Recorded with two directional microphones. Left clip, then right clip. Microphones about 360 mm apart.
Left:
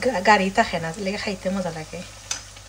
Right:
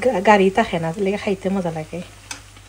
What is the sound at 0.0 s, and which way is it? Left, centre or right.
A woman's voice, right.